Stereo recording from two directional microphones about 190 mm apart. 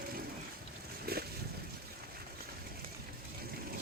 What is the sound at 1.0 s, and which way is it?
Boat, 55° right (ahead or behind).